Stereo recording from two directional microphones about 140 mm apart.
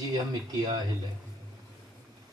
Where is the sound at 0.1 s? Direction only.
30° right (ahead or behind).